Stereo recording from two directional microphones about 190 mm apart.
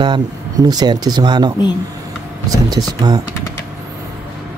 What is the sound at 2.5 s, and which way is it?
Speech, 20° right (ahead or behind).